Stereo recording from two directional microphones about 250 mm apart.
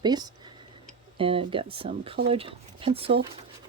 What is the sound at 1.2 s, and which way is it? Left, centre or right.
Speech, right.